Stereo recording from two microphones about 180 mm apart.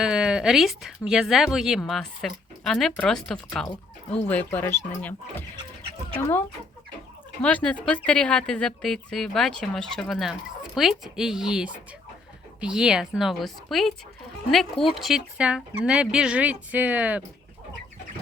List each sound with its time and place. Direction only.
0.0 s speech: 5° right (ahead or behind)
7.4 s speech: 5° left (ahead or behind)